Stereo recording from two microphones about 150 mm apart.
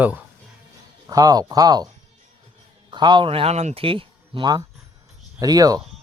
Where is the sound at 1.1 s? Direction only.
25° right (ahead or behind).